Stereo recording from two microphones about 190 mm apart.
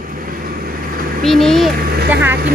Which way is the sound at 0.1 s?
50° right (ahead or behind).